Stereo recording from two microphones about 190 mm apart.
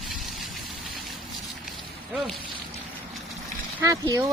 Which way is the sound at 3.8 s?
20° right (ahead or behind).